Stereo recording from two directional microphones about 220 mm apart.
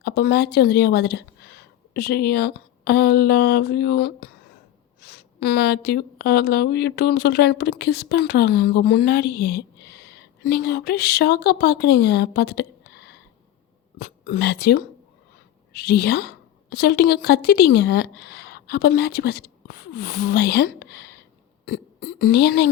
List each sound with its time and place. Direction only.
0.0 s a woman's voice: 45° left (ahead or behind)
14.0 s a woman's voice: 45° left (ahead or behind)